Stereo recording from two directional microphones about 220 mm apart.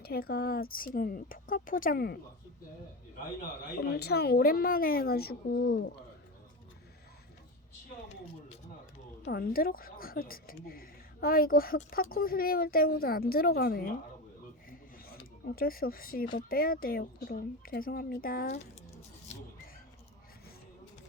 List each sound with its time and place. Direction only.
0.0 s speech: 45° left (ahead or behind)
3.9 s a woman's voice: 45° left (ahead or behind)
9.2 s a woman's voice: 40° left (ahead or behind)
14.7 s a sound: 45° left (ahead or behind)
16.5 s speech: 40° left (ahead or behind)